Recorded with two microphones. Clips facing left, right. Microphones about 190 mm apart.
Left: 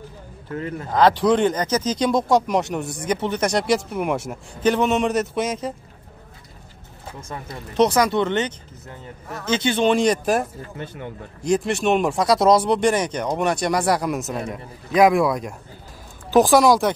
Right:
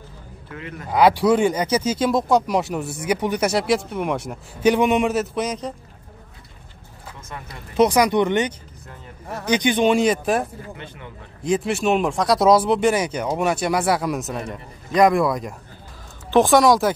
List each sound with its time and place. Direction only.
0.5 s speech: 40° left (ahead or behind)
0.8 s speech: 10° right (ahead or behind)
4.6 s speech: 10° right (ahead or behind)
5.1 s speech: centre (ahead or behind)
7.7 s speech: 10° right (ahead or behind)
11.4 s speech: centre (ahead or behind)